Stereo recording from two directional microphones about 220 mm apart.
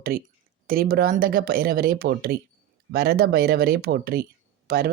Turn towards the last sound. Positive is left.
turn(degrees=-45)  # may be behind; listen again after turning